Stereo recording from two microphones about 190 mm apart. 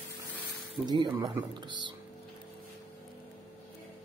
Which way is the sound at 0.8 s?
25° right (ahead or behind).